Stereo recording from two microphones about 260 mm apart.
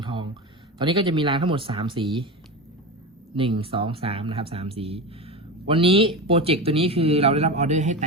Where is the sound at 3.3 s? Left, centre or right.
Right.